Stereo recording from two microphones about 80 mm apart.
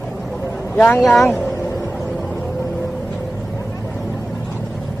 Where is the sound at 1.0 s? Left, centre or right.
Centre.